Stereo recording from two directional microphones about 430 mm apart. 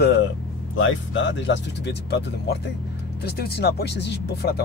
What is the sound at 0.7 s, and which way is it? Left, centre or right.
Speech, left.